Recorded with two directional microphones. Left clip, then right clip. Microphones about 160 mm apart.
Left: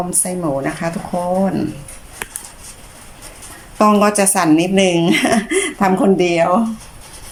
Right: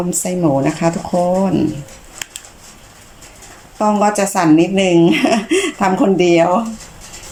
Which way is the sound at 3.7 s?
Centre (ahead or behind).